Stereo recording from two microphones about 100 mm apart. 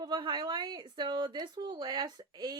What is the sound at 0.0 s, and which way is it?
A woman's voice, 50° right (ahead or behind).